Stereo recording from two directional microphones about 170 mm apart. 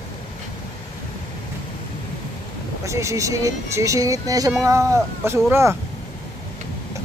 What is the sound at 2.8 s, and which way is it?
Speech, 15° right (ahead or behind).